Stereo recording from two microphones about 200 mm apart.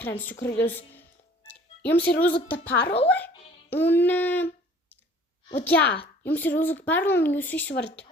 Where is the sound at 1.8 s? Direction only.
10° left (ahead or behind).